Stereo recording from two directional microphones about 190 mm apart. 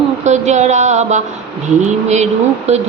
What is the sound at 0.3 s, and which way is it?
Speech, 35° right (ahead or behind).